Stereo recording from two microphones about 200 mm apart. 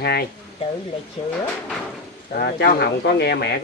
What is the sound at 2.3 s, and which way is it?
Speech, 50° left (ahead or behind).